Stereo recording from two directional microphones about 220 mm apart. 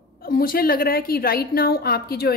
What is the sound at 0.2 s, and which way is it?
A woman's voice, 40° left (ahead or behind).